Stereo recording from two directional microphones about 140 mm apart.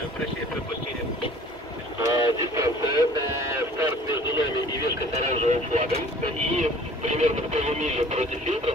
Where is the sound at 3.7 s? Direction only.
20° right (ahead or behind).